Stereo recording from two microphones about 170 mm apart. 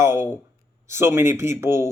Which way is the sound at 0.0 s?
15° right (ahead or behind).